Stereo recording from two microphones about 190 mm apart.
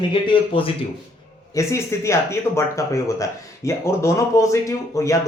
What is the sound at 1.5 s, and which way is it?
Speech, 15° left (ahead or behind).